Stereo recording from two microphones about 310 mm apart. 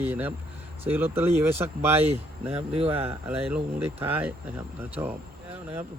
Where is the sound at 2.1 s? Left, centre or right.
Centre.